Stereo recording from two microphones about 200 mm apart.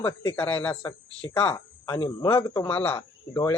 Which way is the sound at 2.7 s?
10° left (ahead or behind).